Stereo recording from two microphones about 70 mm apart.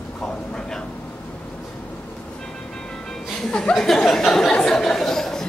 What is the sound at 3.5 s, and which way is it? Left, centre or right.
Speech, centre.